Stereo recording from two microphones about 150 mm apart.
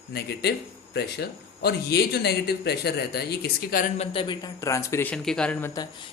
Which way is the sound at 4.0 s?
35° left (ahead or behind).